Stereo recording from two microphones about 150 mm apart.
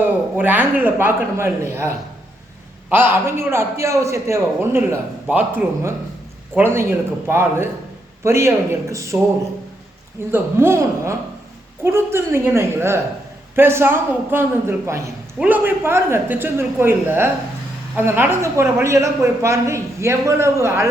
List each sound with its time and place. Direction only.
0.0 s a woman's voice: 10° right (ahead or behind)
2.9 s a woman's voice: 15° right (ahead or behind)
10.3 s a woman's voice: 15° right (ahead or behind)